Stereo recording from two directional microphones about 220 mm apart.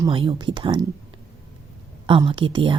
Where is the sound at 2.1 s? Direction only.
25° right (ahead or behind).